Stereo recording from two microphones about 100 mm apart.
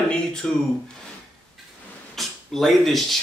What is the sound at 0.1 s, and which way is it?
Speech, 5° left (ahead or behind).